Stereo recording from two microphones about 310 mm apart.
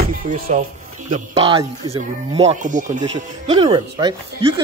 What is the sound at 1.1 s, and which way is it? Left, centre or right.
Speech, centre.